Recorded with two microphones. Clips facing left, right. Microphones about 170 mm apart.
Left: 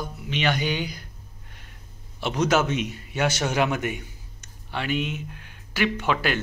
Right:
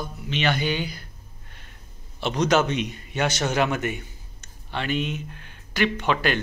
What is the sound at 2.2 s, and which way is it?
Speech, 5° left (ahead or behind).